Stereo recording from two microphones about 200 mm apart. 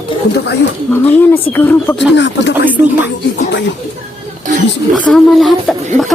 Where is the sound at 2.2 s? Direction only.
60° left (ahead or behind).